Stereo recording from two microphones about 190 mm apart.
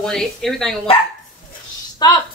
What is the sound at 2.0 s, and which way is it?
Speech, 20° left (ahead or behind).